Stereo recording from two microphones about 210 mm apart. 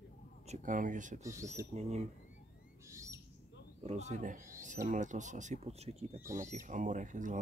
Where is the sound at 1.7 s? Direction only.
30° right (ahead or behind).